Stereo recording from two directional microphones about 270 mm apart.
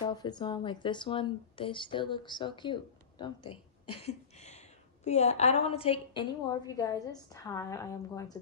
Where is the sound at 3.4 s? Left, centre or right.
Left.